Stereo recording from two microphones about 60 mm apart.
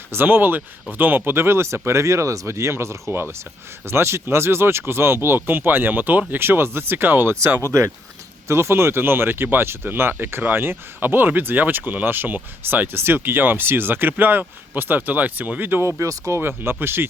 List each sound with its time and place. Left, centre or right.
0.1 s speech: right
7.5 s speech: right
15.8 s speech: right
16.4 s speech: right